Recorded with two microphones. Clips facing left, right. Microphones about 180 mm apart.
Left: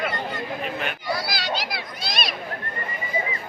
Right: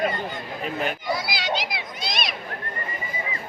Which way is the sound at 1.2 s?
20° right (ahead or behind).